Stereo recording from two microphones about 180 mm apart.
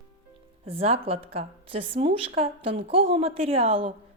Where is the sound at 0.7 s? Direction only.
35° right (ahead or behind).